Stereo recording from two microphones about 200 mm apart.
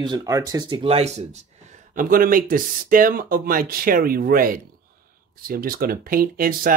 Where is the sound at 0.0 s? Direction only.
20° right (ahead or behind).